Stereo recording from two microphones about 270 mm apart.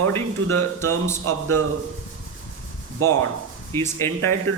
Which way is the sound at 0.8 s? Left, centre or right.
Centre.